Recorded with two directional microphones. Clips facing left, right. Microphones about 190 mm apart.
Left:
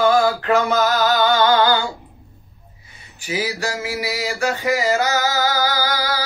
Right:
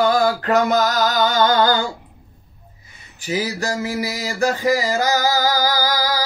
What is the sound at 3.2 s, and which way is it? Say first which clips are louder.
A man's voice: right 1 dB; 35° right (ahead or behind).